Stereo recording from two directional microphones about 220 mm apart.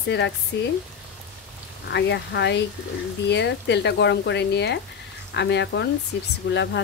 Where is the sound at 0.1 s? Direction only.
55° left (ahead or behind).